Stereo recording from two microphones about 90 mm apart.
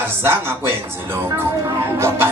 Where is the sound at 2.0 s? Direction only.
30° right (ahead or behind).